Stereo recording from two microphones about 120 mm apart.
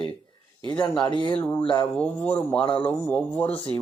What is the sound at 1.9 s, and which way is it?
Speech, 10° left (ahead or behind).